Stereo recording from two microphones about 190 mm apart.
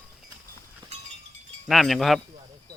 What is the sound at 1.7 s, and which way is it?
Speech, centre (ahead or behind).